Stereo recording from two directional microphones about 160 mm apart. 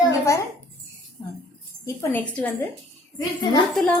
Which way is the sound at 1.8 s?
20° left (ahead or behind).